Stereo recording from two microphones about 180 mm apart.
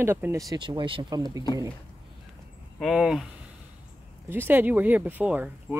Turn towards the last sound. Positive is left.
turn(degrees=-10)  # may be behind; listen again after turning